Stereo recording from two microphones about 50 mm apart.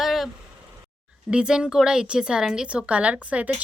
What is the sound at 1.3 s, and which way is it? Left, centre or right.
Speech, centre.